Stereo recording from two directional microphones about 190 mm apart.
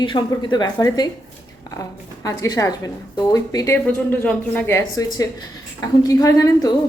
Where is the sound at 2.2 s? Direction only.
15° left (ahead or behind).